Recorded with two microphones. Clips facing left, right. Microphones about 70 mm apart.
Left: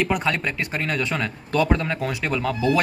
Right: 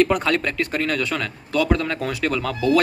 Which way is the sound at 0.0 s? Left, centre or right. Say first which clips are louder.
Right 4 dB; centre.